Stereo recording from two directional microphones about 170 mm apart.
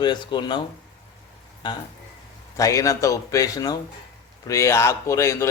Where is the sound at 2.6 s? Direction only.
20° left (ahead or behind).